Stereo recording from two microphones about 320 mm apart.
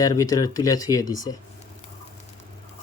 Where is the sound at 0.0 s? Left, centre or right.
Centre.